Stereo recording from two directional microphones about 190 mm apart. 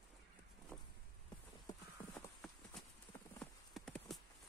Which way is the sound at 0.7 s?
10° left (ahead or behind).